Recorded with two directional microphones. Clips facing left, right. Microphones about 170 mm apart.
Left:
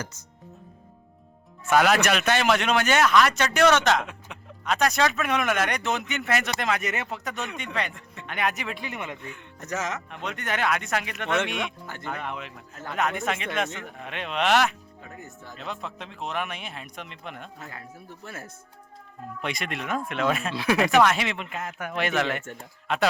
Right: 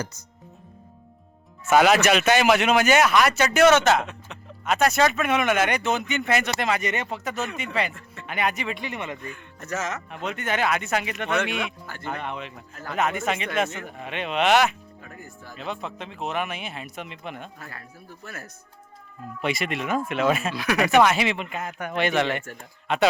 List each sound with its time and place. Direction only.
1.6 s speech: 5° right (ahead or behind)
7.9 s speech: 15° left (ahead or behind)
8.3 s speech: centre (ahead or behind)
9.2 s speech: 20° left (ahead or behind)
10.1 s speech: 5° right (ahead or behind)
15.0 s speech: 20° left (ahead or behind)
15.5 s speech: centre (ahead or behind)
17.6 s speech: 20° left (ahead or behind)
19.4 s speech: 5° right (ahead or behind)
20.6 s speech: 25° left (ahead or behind)
20.8 s speech: 5° right (ahead or behind)